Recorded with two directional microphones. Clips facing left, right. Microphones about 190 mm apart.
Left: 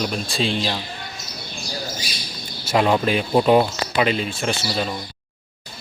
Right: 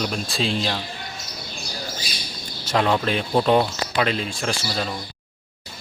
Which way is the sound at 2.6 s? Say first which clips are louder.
Left 3 dB; 10° left (ahead or behind).